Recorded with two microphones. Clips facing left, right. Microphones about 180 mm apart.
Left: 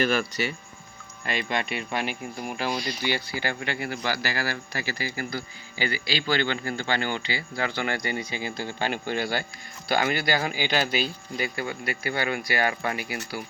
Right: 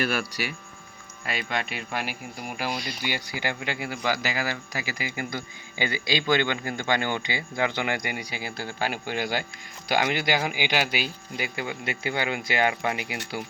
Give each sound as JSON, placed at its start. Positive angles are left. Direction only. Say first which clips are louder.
{"t": 0.0, "sound": "speech", "louder": "left 3 dB", "side_deg": -5}